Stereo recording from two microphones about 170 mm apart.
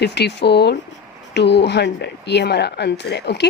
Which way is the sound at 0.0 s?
80° left.